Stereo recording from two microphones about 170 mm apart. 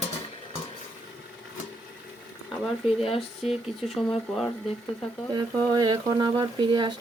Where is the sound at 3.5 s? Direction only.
35° left (ahead or behind).